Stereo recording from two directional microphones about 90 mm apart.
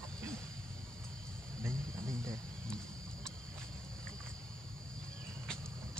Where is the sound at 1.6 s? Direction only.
30° right (ahead or behind).